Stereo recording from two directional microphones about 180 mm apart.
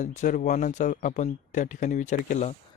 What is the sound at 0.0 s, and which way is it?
Speech, 45° left (ahead or behind).